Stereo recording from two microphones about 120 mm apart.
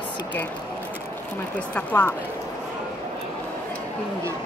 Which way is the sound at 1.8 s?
15° left (ahead or behind).